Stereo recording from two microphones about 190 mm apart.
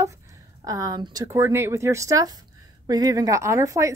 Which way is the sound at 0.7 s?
20° right (ahead or behind).